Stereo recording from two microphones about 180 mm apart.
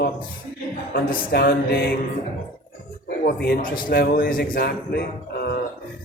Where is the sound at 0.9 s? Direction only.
60° left (ahead or behind).